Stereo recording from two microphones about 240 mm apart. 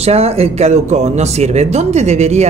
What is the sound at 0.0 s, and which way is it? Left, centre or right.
Speech, right.